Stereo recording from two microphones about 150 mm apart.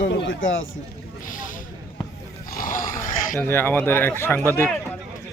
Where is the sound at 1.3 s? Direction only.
65° left (ahead or behind).